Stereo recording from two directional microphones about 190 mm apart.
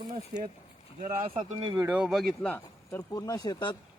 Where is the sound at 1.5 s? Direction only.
25° right (ahead or behind).